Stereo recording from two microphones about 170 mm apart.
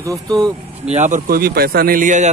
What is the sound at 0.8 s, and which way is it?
Speech, 45° right (ahead or behind).